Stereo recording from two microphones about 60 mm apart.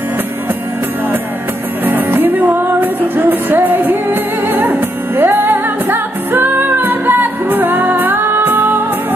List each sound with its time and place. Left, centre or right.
1.9 s music: right